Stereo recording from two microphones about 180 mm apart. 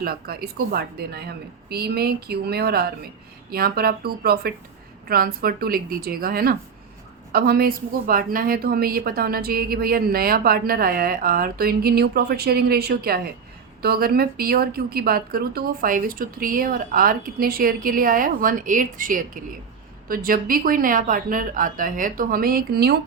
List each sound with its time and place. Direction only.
0.0 s a woman's voice: 55° right (ahead or behind)